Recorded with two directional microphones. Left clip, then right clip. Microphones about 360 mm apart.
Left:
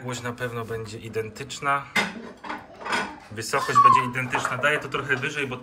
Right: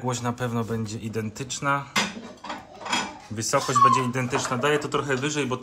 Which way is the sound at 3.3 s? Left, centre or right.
Centre.